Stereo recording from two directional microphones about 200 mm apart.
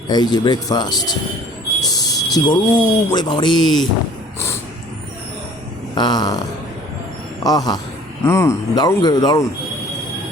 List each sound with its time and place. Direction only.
0.1 s speech: 20° left (ahead or behind)
5.9 s speech: 20° left (ahead or behind)
7.4 s a man's voice: 20° left (ahead or behind)